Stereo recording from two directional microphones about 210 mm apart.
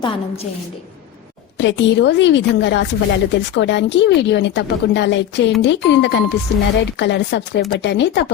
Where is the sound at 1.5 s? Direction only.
60° left (ahead or behind).